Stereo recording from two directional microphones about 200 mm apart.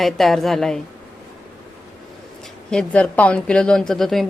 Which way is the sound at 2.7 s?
5° left (ahead or behind).